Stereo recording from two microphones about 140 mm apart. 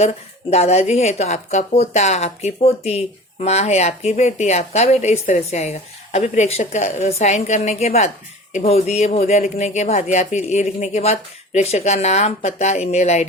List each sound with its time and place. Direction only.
0.5 s a woman's voice: 50° left (ahead or behind)